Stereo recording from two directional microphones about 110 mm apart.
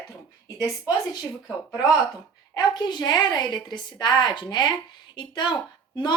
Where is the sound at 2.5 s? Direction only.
40° left (ahead or behind).